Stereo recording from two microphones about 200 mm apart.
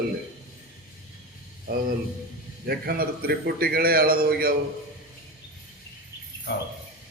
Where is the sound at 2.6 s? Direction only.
50° right (ahead or behind).